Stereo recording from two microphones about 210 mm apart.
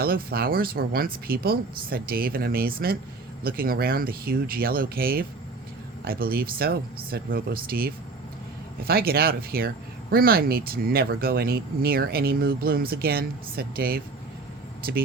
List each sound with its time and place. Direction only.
0.0 s speech: 45° right (ahead or behind)